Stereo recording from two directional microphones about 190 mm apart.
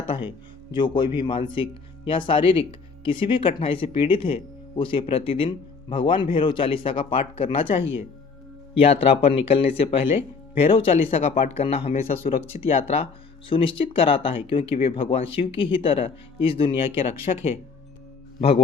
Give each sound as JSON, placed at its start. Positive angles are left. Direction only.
{"t": 0.3, "sound": "speech", "side_deg": 25}
{"t": 13.5, "sound": "speech", "side_deg": 25}
{"t": 17.3, "sound": "speech", "side_deg": 40}